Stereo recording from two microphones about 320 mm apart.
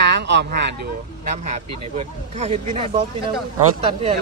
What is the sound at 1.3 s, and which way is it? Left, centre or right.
Speech, right.